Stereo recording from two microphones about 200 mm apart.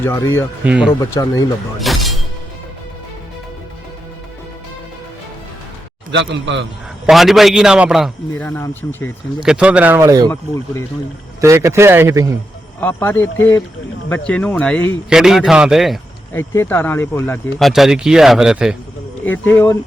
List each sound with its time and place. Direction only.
0.0 s speech: 15° left (ahead or behind)
0.6 s a man's voice: 5° right (ahead or behind)
1.1 s speech: 15° left (ahead or behind)
1.8 s shatter: centre (ahead or behind)
6.1 s a man's voice: 65° right (ahead or behind)
7.1 s a man's voice: centre (ahead or behind)
8.3 s speech: 10° left (ahead or behind)
9.4 s a man's voice: 5° right (ahead or behind)
10.2 s speech: 15° left (ahead or behind)
11.3 s a man's voice: 15° right (ahead or behind)
12.8 s a man's voice: 10° left (ahead or behind)
16.3 s speech: 10° left (ahead or behind)
17.6 s a man's voice: centre (ahead or behind)
19.2 s speech: 10° left (ahead or behind)